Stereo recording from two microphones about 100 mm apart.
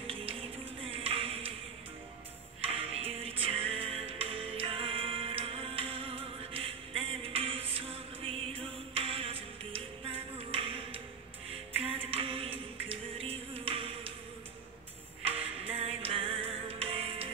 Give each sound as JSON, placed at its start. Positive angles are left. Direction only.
{"t": 0.0, "sound": "music", "side_deg": -75}
{"t": 0.9, "sound": "a sound", "side_deg": -70}
{"t": 2.6, "sound": "music", "side_deg": -75}
{"t": 12.1, "sound": "music", "side_deg": -75}
{"t": 15.3, "sound": "music", "side_deg": -75}